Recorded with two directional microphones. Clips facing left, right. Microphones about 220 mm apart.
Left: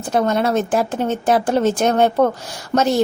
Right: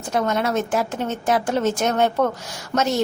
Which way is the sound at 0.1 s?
30° left (ahead or behind).